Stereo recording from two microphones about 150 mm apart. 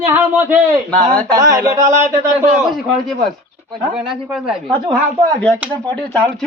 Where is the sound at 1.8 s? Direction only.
55° right (ahead or behind).